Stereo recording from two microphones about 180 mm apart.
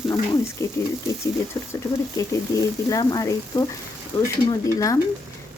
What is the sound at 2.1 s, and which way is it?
Speech, 20° left (ahead or behind).